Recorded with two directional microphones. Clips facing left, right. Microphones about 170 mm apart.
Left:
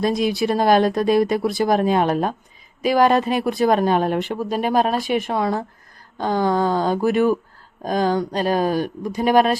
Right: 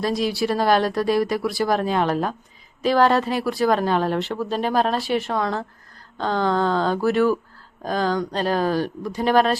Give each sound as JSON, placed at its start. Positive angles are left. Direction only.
{"t": 0.0, "sound": "speech", "side_deg": 20}